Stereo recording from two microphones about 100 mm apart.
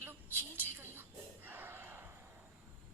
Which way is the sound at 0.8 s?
20° right (ahead or behind).